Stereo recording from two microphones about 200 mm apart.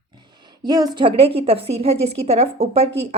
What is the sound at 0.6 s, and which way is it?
A woman's voice, 20° right (ahead or behind).